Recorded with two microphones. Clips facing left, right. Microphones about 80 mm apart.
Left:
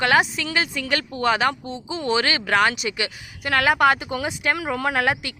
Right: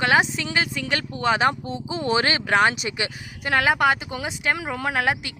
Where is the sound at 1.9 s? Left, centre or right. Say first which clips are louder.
Even; right.